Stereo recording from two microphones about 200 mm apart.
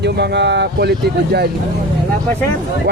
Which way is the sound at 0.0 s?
60° right (ahead or behind).